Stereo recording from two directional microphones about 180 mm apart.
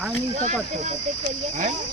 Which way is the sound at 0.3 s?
40° right (ahead or behind).